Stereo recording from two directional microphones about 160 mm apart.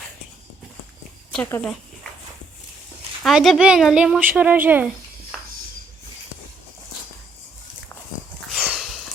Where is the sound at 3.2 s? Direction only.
Centre (ahead or behind).